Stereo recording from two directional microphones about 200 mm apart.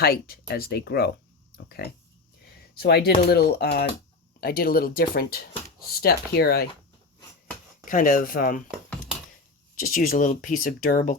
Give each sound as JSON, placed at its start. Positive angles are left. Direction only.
{"t": 0.0, "sound": "speech", "side_deg": 50}
{"t": 7.9, "sound": "speech", "side_deg": 40}
{"t": 9.7, "sound": "speech", "side_deg": 45}